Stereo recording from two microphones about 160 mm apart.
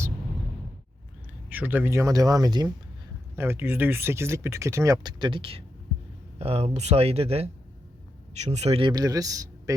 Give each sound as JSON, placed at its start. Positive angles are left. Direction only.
{"t": 1.5, "sound": "speech", "side_deg": -10}
{"t": 3.3, "sound": "speech", "side_deg": -15}
{"t": 8.9, "sound": "speech", "side_deg": -25}